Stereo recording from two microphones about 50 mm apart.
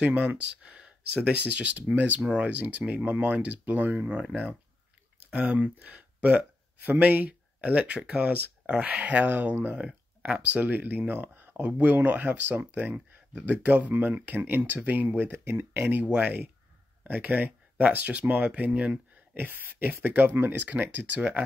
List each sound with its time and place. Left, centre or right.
0.0 s speech: right
0.7 s speech: centre
5.3 s speech: right
6.9 s speech: right
9.2 s speech: right
10.2 s speech: right
11.6 s speech: right
16.1 s speech: right
19.4 s speech: right